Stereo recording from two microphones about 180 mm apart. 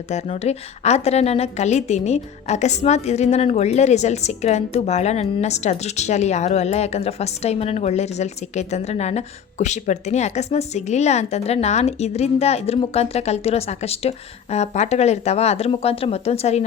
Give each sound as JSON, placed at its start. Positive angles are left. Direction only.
{"t": 0.1, "sound": "a woman's voice", "side_deg": 40}